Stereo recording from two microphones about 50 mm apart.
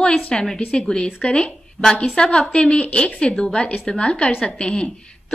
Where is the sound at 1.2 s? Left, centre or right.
Left.